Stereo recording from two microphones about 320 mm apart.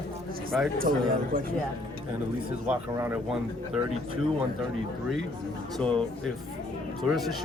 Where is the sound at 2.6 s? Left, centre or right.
Centre.